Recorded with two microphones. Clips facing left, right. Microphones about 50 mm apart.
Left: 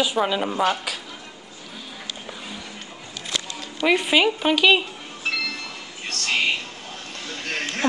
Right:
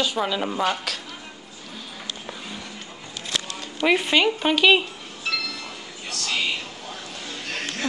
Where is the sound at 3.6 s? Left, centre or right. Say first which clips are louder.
Even; centre.